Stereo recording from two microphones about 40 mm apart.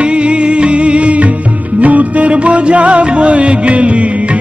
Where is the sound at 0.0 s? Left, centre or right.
Right.